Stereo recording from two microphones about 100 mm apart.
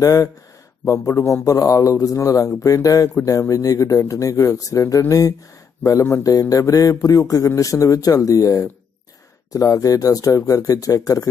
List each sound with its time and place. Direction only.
0.0 s speech: 35° left (ahead or behind)